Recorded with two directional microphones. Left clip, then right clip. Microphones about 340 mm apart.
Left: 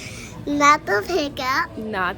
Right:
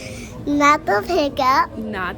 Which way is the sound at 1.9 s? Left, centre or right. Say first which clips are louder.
Left 2 dB; centre.